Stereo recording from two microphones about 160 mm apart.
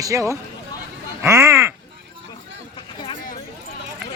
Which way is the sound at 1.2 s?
15° right (ahead or behind).